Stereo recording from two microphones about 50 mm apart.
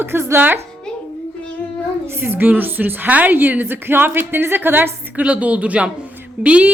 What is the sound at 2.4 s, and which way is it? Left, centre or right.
A woman's voice, right.